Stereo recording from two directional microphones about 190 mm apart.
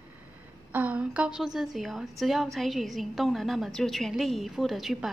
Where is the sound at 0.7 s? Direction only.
10° right (ahead or behind).